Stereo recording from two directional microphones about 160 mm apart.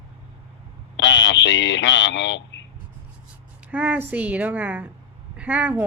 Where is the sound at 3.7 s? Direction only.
10° right (ahead or behind).